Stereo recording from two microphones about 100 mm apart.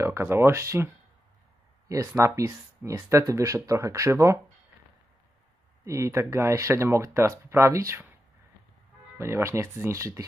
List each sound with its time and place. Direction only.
0.0 s speech: 25° right (ahead or behind)
1.9 s speech: 30° right (ahead or behind)
5.9 s speech: 30° right (ahead or behind)
9.2 s speech: 30° right (ahead or behind)